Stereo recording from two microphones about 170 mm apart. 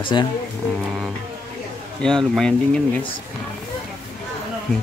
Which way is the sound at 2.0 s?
5° left (ahead or behind).